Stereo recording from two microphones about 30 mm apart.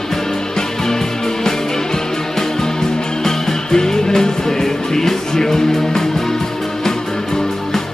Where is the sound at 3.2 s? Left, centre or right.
Centre.